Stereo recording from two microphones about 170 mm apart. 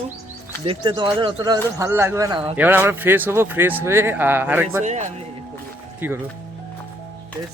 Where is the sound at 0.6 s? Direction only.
30° right (ahead or behind); by 4.8 s 10° right (ahead or behind).